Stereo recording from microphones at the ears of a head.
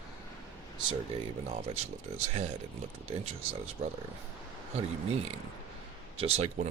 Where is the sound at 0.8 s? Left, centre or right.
Right.